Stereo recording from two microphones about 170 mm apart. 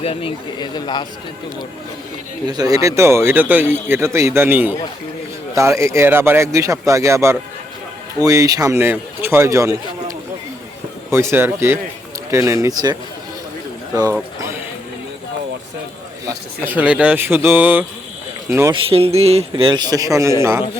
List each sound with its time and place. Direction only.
0.0 s speech: 35° left (ahead or behind)
2.5 s a man's voice: 25° right (ahead or behind)
13.9 s a sound: 20° right (ahead or behind)
16.2 s a man's voice: 10° right (ahead or behind)
18.7 s a man's voice: 35° right (ahead or behind); by 20.7 s 15° right (ahead or behind)